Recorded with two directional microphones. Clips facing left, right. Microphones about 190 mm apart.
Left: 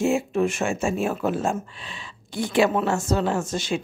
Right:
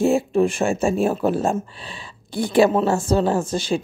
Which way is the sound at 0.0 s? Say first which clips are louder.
Right 4 dB; 35° right (ahead or behind).